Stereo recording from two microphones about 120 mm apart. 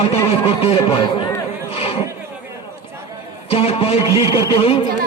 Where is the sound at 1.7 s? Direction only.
55° left (ahead or behind).